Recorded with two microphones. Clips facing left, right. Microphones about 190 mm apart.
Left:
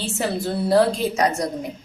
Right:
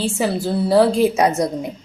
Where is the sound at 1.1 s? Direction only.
25° right (ahead or behind).